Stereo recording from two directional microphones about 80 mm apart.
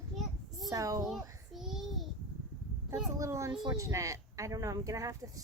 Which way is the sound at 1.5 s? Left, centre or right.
Centre.